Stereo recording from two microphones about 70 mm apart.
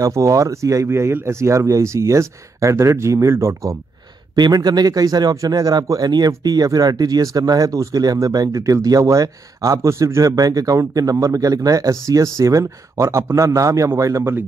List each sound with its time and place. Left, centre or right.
0.0 s speech: right
0.8 s speech: right
4.4 s speech: right
5.3 s speech: right
9.8 s speech: right